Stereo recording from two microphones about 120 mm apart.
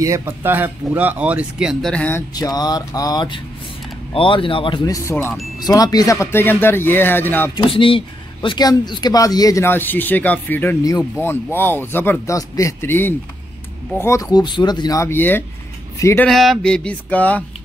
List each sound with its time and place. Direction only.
0.0 s speech: 25° right (ahead or behind); by 2.0 s 5° left (ahead or behind)
2.3 s speech: 30° left (ahead or behind)
4.8 s speech: 30° left (ahead or behind)
7.5 s speech: 45° left (ahead or behind)
9.7 s speech: 15° left (ahead or behind)
10.8 s speech: 30° left (ahead or behind)
11.1 s speech: 20° left (ahead or behind)
14.4 s speech: 40° left (ahead or behind); by 16.3 s 25° left (ahead or behind)
16.3 s speech: centre (ahead or behind)